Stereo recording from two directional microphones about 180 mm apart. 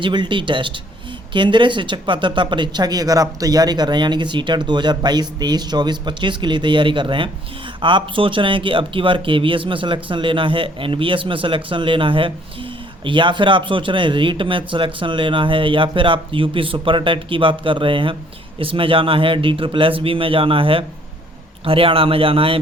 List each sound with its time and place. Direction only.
0.0 s speech: 25° right (ahead or behind)